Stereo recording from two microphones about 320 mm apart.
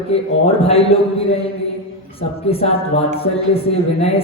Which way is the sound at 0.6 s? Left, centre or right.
Centre.